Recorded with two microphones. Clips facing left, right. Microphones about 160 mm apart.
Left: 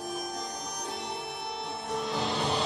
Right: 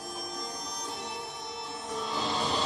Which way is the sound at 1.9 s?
65° left (ahead or behind).